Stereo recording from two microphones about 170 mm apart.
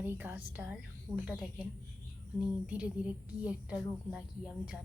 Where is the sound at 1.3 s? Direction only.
5° right (ahead or behind).